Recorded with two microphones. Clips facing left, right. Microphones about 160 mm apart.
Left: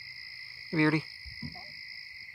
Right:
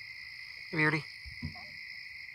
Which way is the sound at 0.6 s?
20° left (ahead or behind).